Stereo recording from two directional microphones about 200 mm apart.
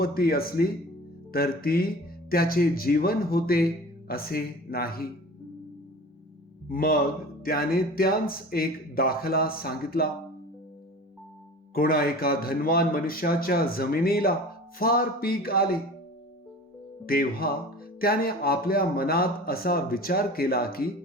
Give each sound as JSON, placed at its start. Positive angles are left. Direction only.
{"t": 0.0, "sound": "speech", "side_deg": 50}
{"t": 6.7, "sound": "speech", "side_deg": 45}
{"t": 11.7, "sound": "speech", "side_deg": 45}
{"t": 17.1, "sound": "speech", "side_deg": 50}